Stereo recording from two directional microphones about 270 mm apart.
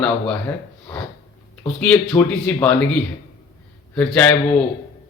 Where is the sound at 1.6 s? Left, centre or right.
Centre.